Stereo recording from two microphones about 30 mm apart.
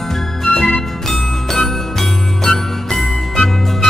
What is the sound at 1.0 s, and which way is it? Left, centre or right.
Music, centre.